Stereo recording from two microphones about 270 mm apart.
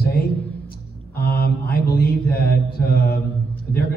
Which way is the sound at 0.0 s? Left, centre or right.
Left.